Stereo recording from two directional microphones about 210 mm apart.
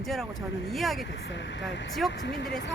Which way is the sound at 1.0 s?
60° left (ahead or behind).